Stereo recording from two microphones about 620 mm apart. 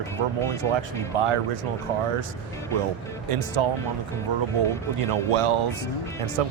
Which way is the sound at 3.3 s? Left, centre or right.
Right.